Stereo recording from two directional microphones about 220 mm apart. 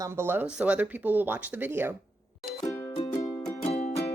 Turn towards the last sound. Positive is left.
turn(degrees=30)  # may be behind; listen again after turning